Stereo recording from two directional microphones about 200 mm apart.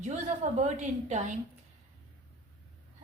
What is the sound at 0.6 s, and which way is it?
Speech, 35° right (ahead or behind).